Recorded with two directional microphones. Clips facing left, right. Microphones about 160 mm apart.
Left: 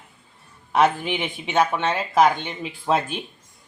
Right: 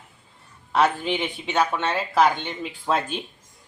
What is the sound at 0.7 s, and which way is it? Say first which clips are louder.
Speech: left 2 dB; 15° left (ahead or behind).